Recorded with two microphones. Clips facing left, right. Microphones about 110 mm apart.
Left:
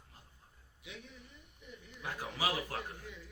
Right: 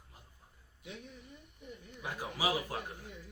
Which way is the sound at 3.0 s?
45° right (ahead or behind).